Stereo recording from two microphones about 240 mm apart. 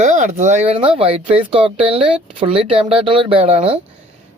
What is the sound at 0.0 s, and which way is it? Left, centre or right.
Speech, right.